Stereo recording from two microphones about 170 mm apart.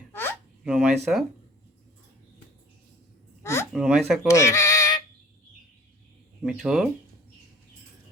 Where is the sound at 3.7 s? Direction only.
Centre (ahead or behind).